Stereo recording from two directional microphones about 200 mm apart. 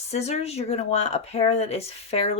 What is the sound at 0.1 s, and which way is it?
Speech, 30° left (ahead or behind).